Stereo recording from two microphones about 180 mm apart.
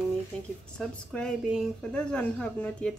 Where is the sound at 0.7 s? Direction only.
5° left (ahead or behind).